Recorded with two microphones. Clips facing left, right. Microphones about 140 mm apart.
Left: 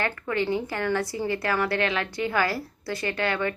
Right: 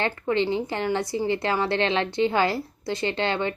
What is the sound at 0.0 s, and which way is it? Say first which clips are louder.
A woman's voice: right 3 dB; 25° right (ahead or behind).